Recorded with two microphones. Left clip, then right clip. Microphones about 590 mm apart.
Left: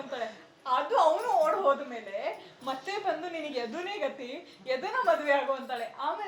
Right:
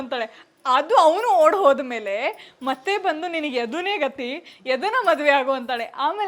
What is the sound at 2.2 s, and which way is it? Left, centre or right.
A woman's voice, right.